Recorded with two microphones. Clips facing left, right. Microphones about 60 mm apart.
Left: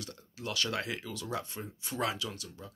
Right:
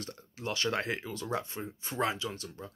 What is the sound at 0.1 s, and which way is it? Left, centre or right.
Speech, right.